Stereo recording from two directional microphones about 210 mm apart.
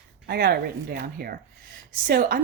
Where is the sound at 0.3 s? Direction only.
45° right (ahead or behind).